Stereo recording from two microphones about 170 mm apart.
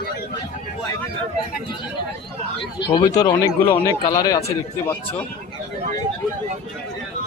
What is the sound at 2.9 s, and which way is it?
Speech, 20° left (ahead or behind).